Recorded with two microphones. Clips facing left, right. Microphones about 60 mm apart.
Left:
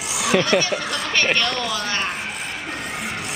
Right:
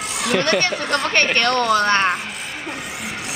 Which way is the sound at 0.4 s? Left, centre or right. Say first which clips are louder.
Right 2 dB; right.